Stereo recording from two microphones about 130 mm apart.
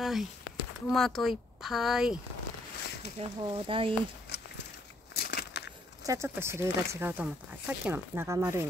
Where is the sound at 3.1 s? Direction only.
40° right (ahead or behind).